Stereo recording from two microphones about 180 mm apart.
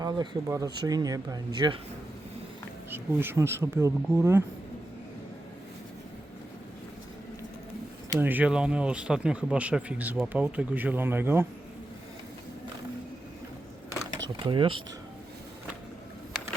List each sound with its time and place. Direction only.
0.0 s speech: 20° right (ahead or behind)
2.9 s speech: 10° right (ahead or behind)
8.2 s speech: 10° right (ahead or behind)
14.2 s speech: 25° right (ahead or behind)